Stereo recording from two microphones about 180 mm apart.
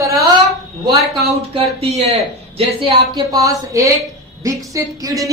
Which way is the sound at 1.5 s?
35° right (ahead or behind).